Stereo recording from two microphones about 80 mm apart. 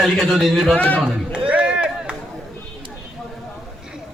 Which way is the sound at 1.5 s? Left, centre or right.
Centre.